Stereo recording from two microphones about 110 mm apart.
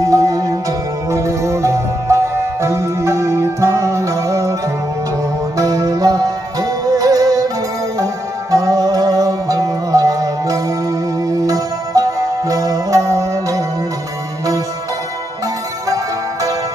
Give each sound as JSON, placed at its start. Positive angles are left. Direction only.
{"t": 0.0, "sound": "music", "side_deg": -30}
{"t": 5.6, "sound": "music", "side_deg": -30}